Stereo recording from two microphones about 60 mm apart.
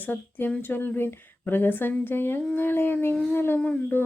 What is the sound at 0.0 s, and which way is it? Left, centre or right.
Speech, left.